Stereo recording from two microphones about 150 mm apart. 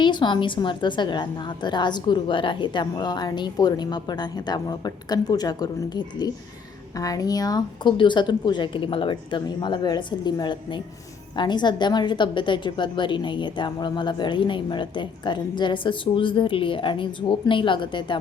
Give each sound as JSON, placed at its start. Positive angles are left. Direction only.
{"t": 0.0, "sound": "a woman's voice", "side_deg": 30}